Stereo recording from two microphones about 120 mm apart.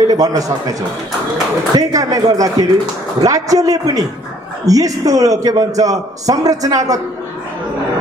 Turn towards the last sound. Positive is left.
turn(degrees=-30)  # may be behind; listen again after turning